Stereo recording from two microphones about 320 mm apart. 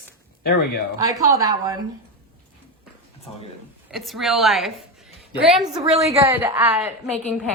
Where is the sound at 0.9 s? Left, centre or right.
Centre.